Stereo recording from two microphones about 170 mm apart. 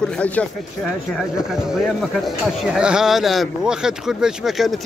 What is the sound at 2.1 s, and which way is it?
Speech, centre (ahead or behind).